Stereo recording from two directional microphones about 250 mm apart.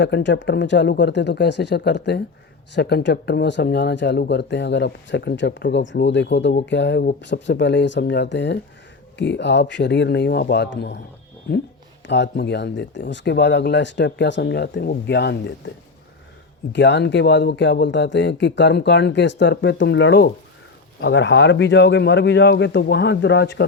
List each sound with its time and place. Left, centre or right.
0.0 s speech: left
12.0 s speech: left
16.7 s speech: left